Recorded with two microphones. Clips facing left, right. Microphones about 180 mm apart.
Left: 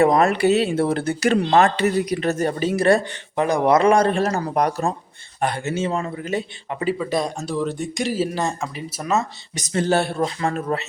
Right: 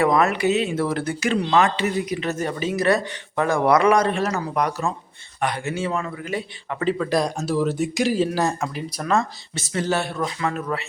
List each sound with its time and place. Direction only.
0.0 s speech: 30° left (ahead or behind)
1.3 s a man's voice: 50° left (ahead or behind); by 6.8 s 25° left (ahead or behind)
6.8 s speech: 5° left (ahead or behind)
9.6 s a man's voice: 25° left (ahead or behind)